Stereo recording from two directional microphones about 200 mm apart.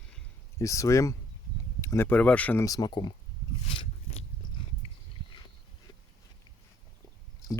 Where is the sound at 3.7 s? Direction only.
30° left (ahead or behind).